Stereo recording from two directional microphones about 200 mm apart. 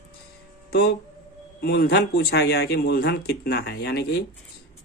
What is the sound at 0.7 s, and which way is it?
Speech, 50° left (ahead or behind).